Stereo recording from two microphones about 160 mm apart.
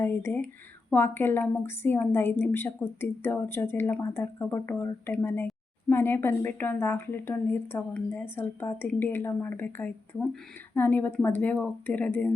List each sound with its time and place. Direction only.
0.0 s a woman's voice: 15° left (ahead or behind)